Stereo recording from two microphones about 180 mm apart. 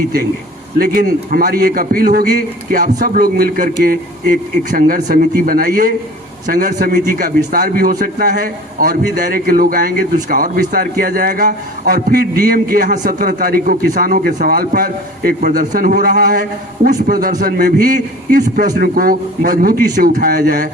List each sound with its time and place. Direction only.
0.8 s a man's voice: 55° right (ahead or behind)